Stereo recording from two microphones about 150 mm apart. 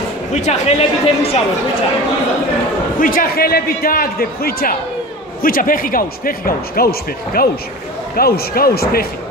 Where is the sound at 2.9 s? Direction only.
70° left (ahead or behind); by 9.1 s 90° left.